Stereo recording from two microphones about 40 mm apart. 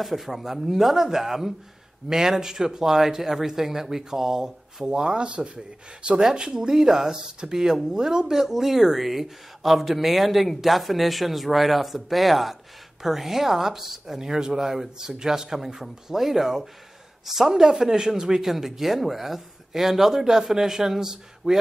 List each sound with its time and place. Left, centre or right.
0.0 s speech: centre
4.8 s speech: right